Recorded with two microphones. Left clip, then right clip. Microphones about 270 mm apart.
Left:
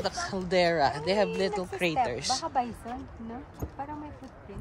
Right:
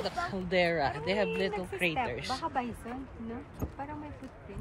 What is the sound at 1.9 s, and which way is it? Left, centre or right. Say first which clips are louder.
Speech: left 5 dB; left.